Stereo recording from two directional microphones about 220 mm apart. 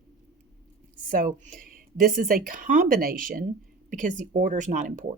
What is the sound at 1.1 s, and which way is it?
A woman's voice, 35° right (ahead or behind).